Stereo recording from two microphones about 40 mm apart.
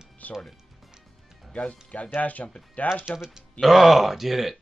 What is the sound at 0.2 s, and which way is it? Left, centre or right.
Music, left.